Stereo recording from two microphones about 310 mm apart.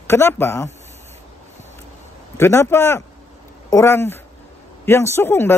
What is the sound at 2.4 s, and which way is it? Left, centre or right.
A man's voice, centre.